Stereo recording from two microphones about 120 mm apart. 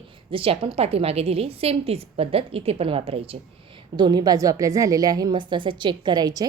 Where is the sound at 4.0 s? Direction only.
35° right (ahead or behind).